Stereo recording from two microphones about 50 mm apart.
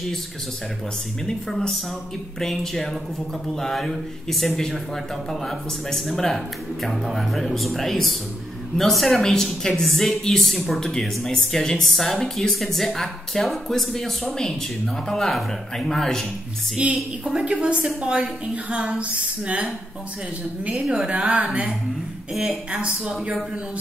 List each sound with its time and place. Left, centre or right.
2.4 s a woman's voice: centre
16.7 s a woman's voice: centre
18.9 s a sound: right
20.7 s a woman's voice: centre
22.3 s speech: centre